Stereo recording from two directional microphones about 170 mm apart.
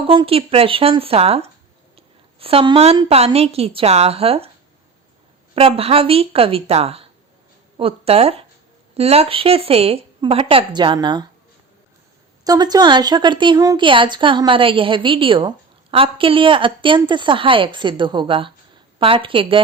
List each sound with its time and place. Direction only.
0.1 s a woman's voice: 35° right (ahead or behind)
5.5 s a woman's voice: 35° right (ahead or behind)
12.5 s a woman's voice: 25° right (ahead or behind)